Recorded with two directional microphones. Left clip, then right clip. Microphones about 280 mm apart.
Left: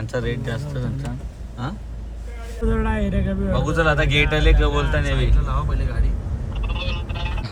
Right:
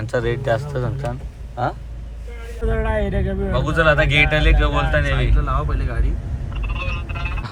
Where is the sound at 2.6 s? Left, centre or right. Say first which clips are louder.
Even; right.